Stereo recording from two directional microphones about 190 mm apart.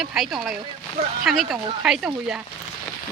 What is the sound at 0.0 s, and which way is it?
Speech, centre (ahead or behind).